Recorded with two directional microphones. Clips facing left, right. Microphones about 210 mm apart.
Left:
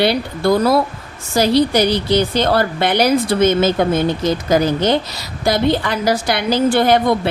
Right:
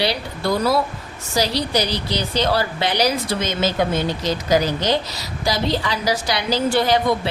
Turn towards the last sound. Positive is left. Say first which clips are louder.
# left 4 dB
turn(degrees=55)  # may be behind; listen again after turning